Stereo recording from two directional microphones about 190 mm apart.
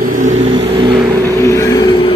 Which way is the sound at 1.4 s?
15° left (ahead or behind).